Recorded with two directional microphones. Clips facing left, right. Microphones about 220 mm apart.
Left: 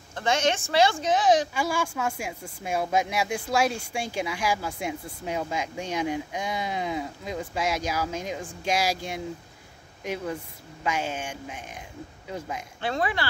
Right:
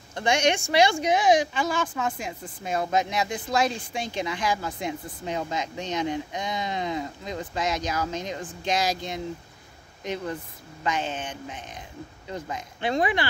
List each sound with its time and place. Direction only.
0.1 s speech: 15° right (ahead or behind)
1.5 s speech: 10° left (ahead or behind)
12.8 s speech: 15° right (ahead or behind)